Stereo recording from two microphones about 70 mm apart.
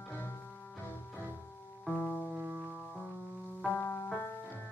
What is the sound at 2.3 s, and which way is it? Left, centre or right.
Music, centre.